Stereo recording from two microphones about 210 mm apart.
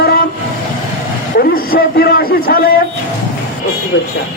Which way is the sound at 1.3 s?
45° left (ahead or behind).